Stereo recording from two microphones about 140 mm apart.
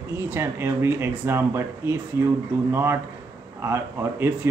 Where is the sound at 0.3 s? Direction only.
20° right (ahead or behind).